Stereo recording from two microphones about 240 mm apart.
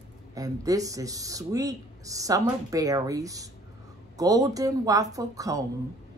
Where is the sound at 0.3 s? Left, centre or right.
Centre.